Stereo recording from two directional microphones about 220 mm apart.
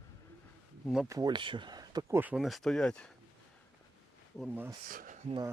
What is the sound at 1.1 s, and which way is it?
Speech, 15° right (ahead or behind).